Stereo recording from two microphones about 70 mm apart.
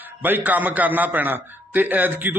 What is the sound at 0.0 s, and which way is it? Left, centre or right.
A man's voice, right.